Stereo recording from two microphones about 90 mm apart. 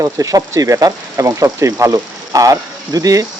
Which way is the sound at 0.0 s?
40° right (ahead or behind).